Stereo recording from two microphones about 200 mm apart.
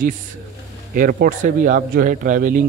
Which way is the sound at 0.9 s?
45° right (ahead or behind).